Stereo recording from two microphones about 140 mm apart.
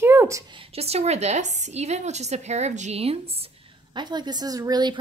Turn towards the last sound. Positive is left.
turn(degrees=-30)  # may be behind; listen again after turning